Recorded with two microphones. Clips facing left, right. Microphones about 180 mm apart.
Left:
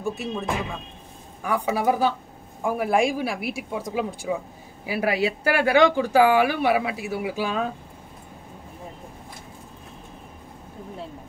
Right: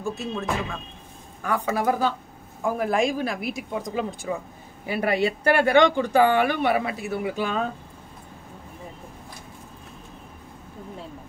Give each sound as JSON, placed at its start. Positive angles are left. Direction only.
{"t": 0.0, "sound": "a woman's voice", "side_deg": 15}